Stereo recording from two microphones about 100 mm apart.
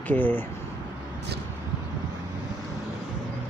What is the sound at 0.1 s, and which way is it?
Speech, 20° left (ahead or behind).